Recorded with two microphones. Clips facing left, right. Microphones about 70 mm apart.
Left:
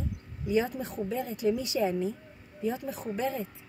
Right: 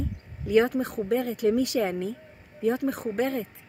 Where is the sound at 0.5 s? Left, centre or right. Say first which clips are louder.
Right 6 dB; right.